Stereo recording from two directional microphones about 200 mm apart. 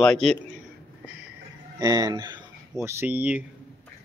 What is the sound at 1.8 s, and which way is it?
Speech, 20° right (ahead or behind).